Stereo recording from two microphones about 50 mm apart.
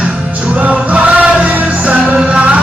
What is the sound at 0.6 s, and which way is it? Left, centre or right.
Music, right.